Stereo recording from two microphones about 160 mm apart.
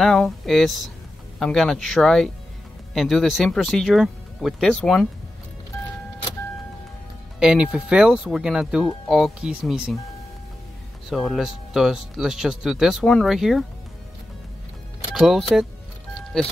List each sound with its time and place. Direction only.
0.0 s speech: centre (ahead or behind)
7.3 s speech: 5° right (ahead or behind)
11.1 s speech: centre (ahead or behind)
15.1 s speech: centre (ahead or behind)
16.2 s music: 5° left (ahead or behind)